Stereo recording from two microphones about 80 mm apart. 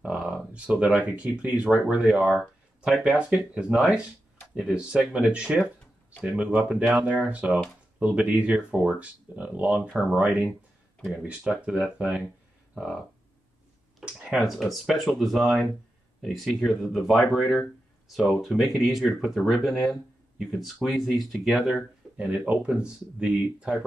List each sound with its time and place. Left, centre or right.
0.0 s speech: centre
13.9 s speech: centre
22.1 s speech: centre